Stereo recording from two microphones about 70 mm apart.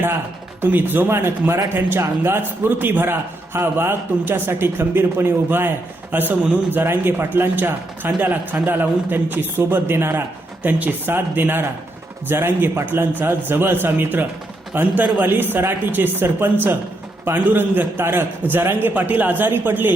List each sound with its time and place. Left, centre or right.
0.6 s a man's voice: right